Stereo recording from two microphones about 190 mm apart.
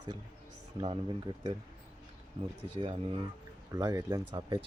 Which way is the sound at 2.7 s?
25° right (ahead or behind).